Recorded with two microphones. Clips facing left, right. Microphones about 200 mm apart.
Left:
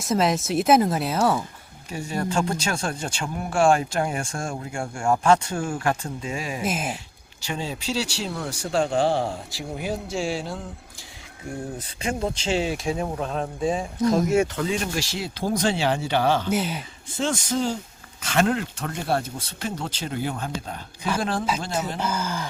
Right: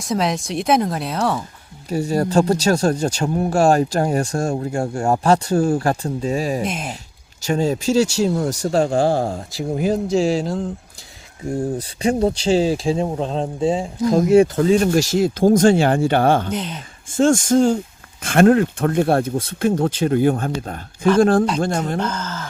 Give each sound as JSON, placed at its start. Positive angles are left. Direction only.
{"t": 0.0, "sound": "speech", "side_deg": 0}
{"t": 1.9, "sound": "speech", "side_deg": -40}
{"t": 6.6, "sound": "speech", "side_deg": 5}
{"t": 7.4, "sound": "speech", "side_deg": -45}
{"t": 11.8, "sound": "speech", "side_deg": -35}
{"t": 14.0, "sound": "speech", "side_deg": 0}
{"t": 14.3, "sound": "speech", "side_deg": -35}
{"t": 16.5, "sound": "speech", "side_deg": 5}
{"t": 17.1, "sound": "speech", "side_deg": -50}
{"t": 22.0, "sound": "speech", "side_deg": 10}